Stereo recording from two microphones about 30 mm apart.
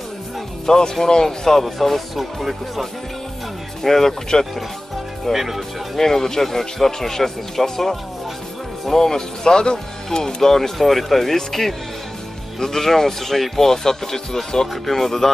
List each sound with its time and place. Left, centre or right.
0.7 s speech: centre
3.8 s speech: centre
5.3 s speech: centre
5.9 s speech: centre
10.1 s speech: centre